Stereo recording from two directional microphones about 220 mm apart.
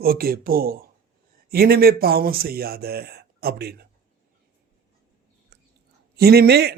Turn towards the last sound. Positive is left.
turn(degrees=-45)  # may be behind; listen again after turning